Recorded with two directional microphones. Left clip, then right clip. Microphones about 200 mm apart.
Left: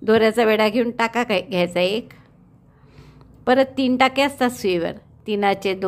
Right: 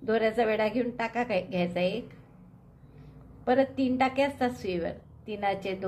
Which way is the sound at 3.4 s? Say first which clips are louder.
Left 8 dB; 45° left (ahead or behind).